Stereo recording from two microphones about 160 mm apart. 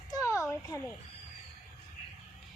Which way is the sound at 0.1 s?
20° left (ahead or behind).